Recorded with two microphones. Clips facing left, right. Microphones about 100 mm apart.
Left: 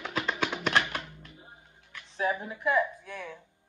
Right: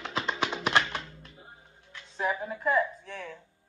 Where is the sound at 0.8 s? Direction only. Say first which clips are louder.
Even; 15° left (ahead or behind).